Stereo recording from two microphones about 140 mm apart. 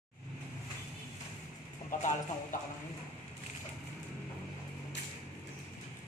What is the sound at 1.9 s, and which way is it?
Speech, 65° left (ahead or behind).